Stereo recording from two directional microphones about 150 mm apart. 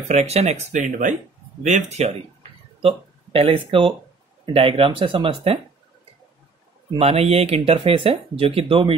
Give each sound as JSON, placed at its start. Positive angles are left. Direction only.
{"t": 0.1, "sound": "speech", "side_deg": -45}
{"t": 3.3, "sound": "speech", "side_deg": -40}
{"t": 7.0, "sound": "speech", "side_deg": -40}